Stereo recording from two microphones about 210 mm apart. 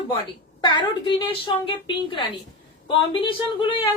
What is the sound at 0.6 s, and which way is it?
A woman's voice, 20° left (ahead or behind).